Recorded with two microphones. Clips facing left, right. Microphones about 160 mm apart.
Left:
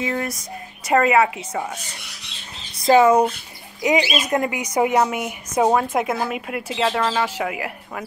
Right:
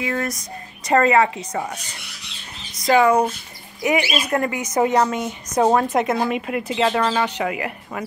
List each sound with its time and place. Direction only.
0.0 s speech: 20° left (ahead or behind)
0.8 s speech: 10° left (ahead or behind)
2.8 s speech: 25° left (ahead or behind); by 8.0 s centre (ahead or behind)